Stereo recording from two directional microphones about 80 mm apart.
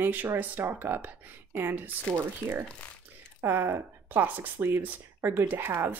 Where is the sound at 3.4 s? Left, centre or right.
Right.